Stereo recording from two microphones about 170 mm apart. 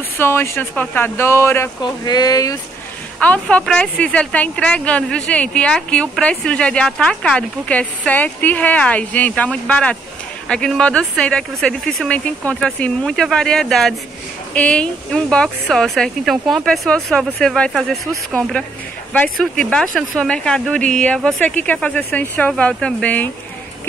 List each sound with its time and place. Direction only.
0.2 s a woman's voice: 15° left (ahead or behind)
3.2 s a woman's voice: 10° left (ahead or behind)